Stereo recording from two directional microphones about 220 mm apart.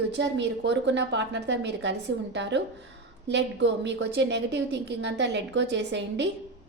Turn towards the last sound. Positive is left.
turn(degrees=-55)  # may be behind; listen again after turning